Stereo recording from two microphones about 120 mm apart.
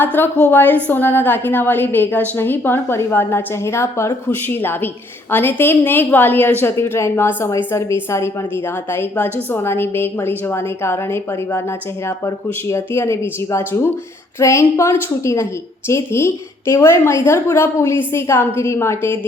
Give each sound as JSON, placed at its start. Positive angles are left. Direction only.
{"t": 0.0, "sound": "a woman's voice", "side_deg": 15}